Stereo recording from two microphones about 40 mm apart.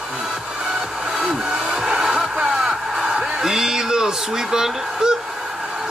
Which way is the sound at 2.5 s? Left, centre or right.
Centre.